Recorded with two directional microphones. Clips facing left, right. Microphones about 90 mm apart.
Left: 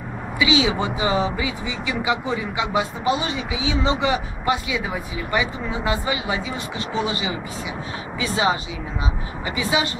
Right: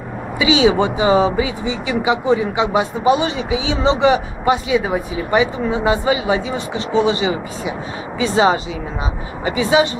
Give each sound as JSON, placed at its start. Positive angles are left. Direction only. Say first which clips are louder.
{"t": 0.4, "sound": "speech", "louder": "right 6 dB", "side_deg": -25}
{"t": 4.8, "sound": "speech", "louder": "right 7 dB", "side_deg": -35}